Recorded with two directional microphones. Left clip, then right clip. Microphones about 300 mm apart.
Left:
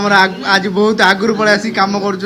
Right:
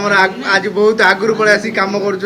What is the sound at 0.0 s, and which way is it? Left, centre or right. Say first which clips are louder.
A man's voice: left 1 dB; centre.